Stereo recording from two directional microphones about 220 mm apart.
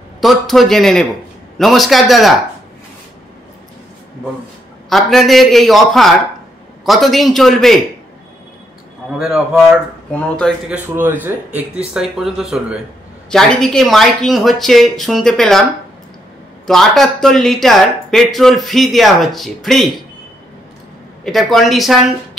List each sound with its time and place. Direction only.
0.2 s speech: centre (ahead or behind)
4.8 s speech: centre (ahead or behind)
9.2 s speech: 5° right (ahead or behind)
11.0 s speech: 10° right (ahead or behind)
16.6 s speech: centre (ahead or behind)
21.2 s speech: centre (ahead or behind)